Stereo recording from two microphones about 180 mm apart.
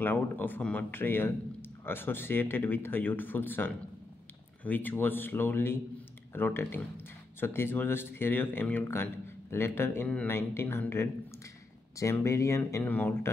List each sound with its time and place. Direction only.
0.0 s speech: 10° left (ahead or behind)